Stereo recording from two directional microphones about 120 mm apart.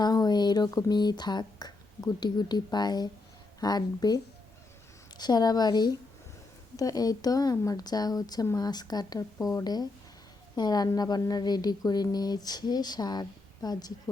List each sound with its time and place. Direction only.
0.0 s a woman's voice: 35° left (ahead or behind)